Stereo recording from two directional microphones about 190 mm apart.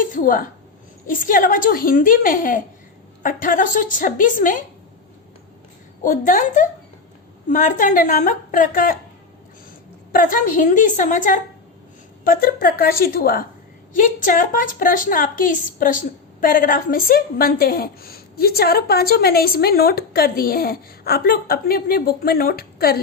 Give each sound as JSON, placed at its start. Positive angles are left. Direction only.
{"t": 0.0, "sound": "a woman's voice", "side_deg": 45}
{"t": 6.0, "sound": "a woman's voice", "side_deg": 45}
{"t": 10.1, "sound": "a woman's voice", "side_deg": 45}